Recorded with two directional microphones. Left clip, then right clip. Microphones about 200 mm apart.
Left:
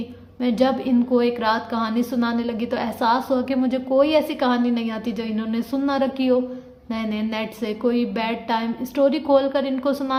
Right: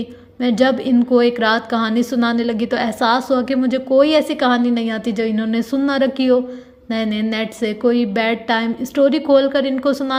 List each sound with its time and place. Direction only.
0.3 s a woman's voice: 20° right (ahead or behind)